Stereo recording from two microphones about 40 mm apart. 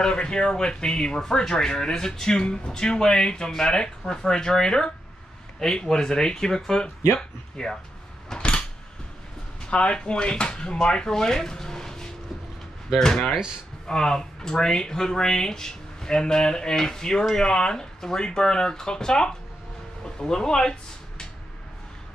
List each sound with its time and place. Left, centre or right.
0.0 s speech: left
8.4 s cupboard open or close: left
9.7 s speech: left